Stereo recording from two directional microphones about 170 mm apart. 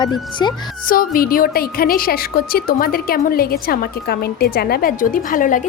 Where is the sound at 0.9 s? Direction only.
55° left (ahead or behind).